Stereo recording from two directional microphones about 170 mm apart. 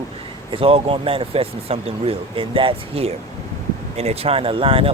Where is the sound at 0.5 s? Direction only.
35° right (ahead or behind).